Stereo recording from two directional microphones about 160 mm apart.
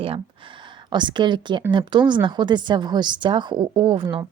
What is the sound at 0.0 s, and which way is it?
A woman's voice, 35° right (ahead or behind).